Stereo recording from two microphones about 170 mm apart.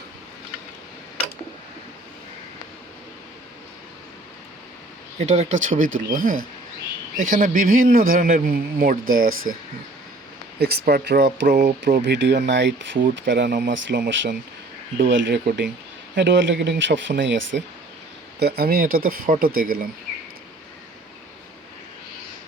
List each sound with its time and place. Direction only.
5.2 s a man's voice: 40° right (ahead or behind); by 9.6 s 55° right (ahead or behind)
10.6 s speech: 65° right (ahead or behind)
11.4 s speech: 50° right (ahead or behind)
12.0 s speech: 90° right
18.3 s a man's voice: 70° right (ahead or behind)